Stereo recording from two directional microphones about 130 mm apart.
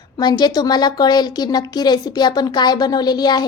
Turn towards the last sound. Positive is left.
turn(degrees=30)  # may be behind; listen again after turning